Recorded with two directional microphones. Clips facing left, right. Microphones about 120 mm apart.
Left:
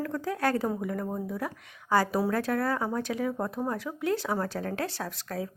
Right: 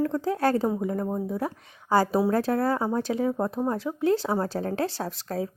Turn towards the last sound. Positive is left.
turn(degrees=-30)  # may be behind; listen again after turning